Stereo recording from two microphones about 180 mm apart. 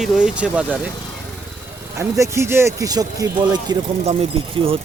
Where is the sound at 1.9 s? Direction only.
15° right (ahead or behind).